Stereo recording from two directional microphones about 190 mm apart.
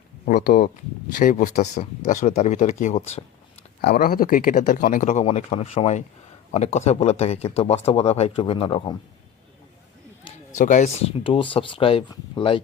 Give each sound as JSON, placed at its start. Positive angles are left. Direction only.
{"t": 0.3, "sound": "speech", "side_deg": 45}
{"t": 3.8, "sound": "speech", "side_deg": 55}
{"t": 10.6, "sound": "speech", "side_deg": 40}